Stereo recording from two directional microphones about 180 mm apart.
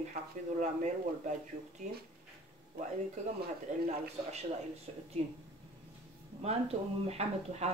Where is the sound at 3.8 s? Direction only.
35° right (ahead or behind).